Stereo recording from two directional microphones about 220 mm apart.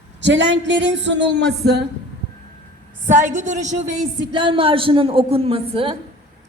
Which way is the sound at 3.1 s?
35° right (ahead or behind).